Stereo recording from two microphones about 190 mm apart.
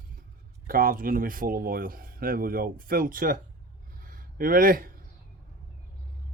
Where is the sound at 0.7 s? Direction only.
50° right (ahead or behind).